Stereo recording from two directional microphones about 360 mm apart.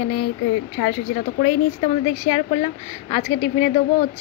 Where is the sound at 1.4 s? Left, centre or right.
Left.